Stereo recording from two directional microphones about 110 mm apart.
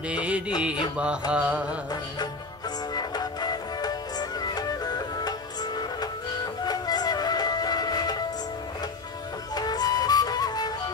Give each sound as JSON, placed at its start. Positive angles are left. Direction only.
{"t": 0.1, "sound": "music", "side_deg": -10}
{"t": 2.9, "sound": "music", "side_deg": 40}
{"t": 9.6, "sound": "music", "side_deg": 35}